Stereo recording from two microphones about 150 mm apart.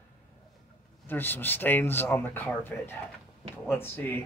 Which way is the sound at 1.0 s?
15° left (ahead or behind).